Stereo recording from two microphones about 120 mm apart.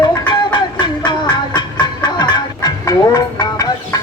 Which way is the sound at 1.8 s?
35° left (ahead or behind).